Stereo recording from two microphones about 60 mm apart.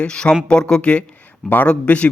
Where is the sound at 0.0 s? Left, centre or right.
Centre.